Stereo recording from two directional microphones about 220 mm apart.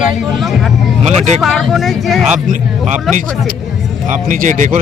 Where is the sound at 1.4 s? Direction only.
Centre (ahead or behind).